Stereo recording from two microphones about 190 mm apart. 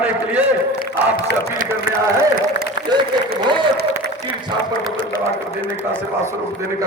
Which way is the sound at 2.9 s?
25° right (ahead or behind).